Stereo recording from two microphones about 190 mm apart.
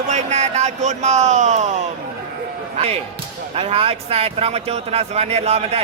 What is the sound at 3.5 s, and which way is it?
A man's voice, 30° right (ahead or behind).